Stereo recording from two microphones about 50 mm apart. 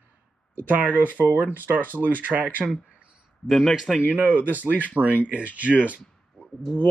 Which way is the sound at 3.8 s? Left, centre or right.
Centre.